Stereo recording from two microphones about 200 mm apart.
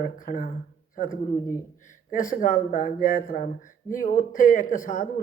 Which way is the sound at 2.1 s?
40° left (ahead or behind).